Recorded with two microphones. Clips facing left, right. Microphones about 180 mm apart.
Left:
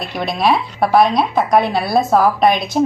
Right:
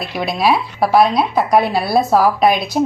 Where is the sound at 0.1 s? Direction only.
5° right (ahead or behind).